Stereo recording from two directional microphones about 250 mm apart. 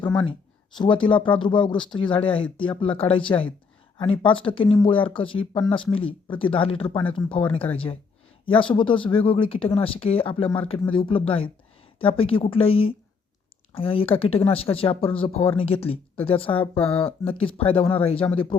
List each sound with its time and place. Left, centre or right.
0.8 s speech: centre